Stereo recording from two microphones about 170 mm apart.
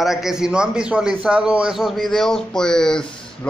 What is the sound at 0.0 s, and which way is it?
A man's voice, centre (ahead or behind).